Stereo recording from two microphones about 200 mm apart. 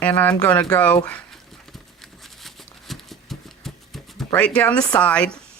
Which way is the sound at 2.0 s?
Centre (ahead or behind).